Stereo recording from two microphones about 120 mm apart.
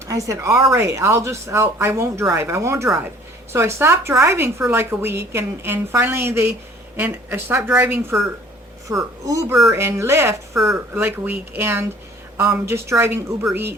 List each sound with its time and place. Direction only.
0.1 s a woman's voice: 25° right (ahead or behind)
8.9 s a woman's voice: 25° right (ahead or behind)